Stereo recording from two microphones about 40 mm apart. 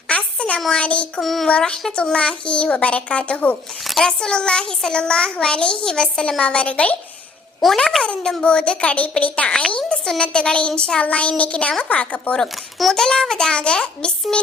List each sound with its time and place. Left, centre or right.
0.1 s a sound: left
0.8 s a child's voice: left
1.2 s child singing: centre
1.5 s a child's voice: left
4.0 s a child's voice: centre
7.6 s child singing: centre
8.0 s a child's voice: left
11.0 s a child's voice: left
12.9 s child singing: centre
13.5 s a child's voice: left